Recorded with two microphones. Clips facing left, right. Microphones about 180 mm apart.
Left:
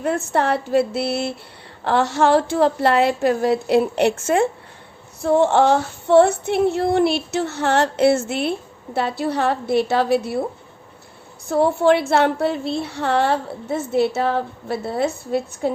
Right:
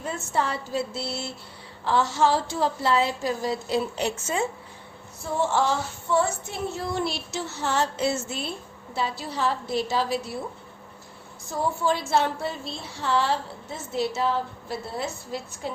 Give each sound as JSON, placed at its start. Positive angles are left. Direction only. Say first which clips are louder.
{"t": 0.0, "sound": "female singing", "louder": "left 7 dB", "side_deg": 65}
{"t": 11.4, "sound": "female singing", "louder": "left 10 dB", "side_deg": 65}